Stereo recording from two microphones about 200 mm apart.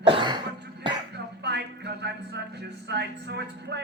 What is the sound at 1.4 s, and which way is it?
Speech, 60° right (ahead or behind).